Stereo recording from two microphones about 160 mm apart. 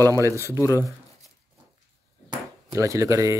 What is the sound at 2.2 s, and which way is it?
Ping, 20° right (ahead or behind).